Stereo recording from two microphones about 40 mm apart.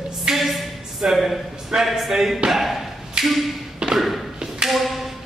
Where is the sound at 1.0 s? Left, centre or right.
Right.